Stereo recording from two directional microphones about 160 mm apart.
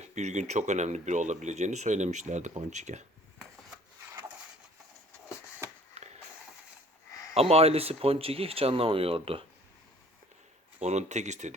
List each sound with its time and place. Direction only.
0.0 s speech: 45° right (ahead or behind)
6.0 s a sound: 40° right (ahead or behind)
7.3 s speech: 40° right (ahead or behind)
10.8 s speech: 45° right (ahead or behind)